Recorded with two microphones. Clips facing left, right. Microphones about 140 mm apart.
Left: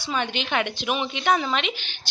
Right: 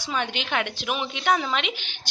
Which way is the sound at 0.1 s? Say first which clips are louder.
Left 1 dB; 5° right (ahead or behind).